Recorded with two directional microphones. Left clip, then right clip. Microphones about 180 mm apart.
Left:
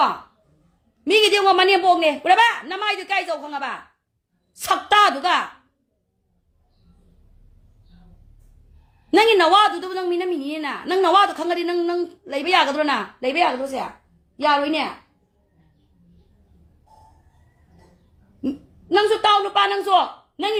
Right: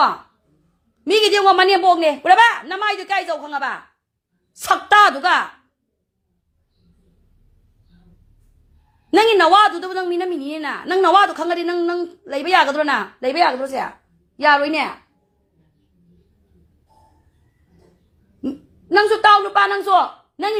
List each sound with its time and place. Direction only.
1.0 s a man's voice: 15° right (ahead or behind)
9.0 s a man's voice: 10° right (ahead or behind)
18.9 s a man's voice: 15° right (ahead or behind)